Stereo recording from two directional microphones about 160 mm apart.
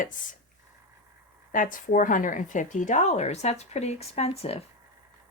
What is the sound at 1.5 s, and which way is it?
Speech, 55° left (ahead or behind).